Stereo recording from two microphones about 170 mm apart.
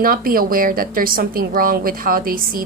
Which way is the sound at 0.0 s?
60° right (ahead or behind).